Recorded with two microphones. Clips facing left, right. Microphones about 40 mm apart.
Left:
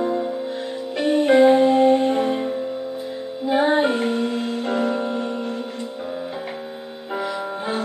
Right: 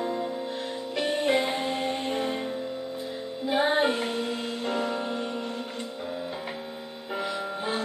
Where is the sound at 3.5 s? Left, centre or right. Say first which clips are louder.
Left 6 dB; centre.